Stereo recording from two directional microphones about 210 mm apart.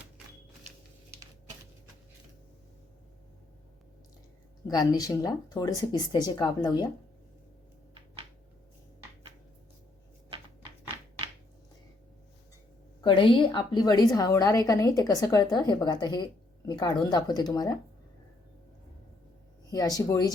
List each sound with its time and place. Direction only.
4.6 s speech: 20° left (ahead or behind)
13.0 s a woman's voice: 25° left (ahead or behind)
20.0 s a woman's voice: 20° left (ahead or behind)